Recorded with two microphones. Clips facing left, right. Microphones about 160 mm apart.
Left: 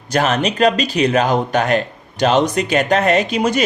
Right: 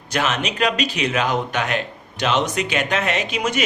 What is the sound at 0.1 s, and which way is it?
Speech, 40° left (ahead or behind).